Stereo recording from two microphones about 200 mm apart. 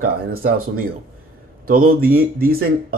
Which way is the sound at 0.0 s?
45° right (ahead or behind).